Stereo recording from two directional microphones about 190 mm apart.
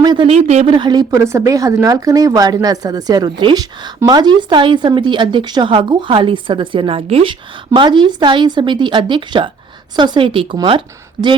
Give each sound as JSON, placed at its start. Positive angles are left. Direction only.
{"t": 0.0, "sound": "speech", "side_deg": -25}